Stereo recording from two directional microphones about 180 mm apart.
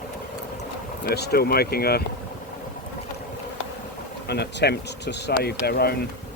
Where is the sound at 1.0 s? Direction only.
60° left (ahead or behind).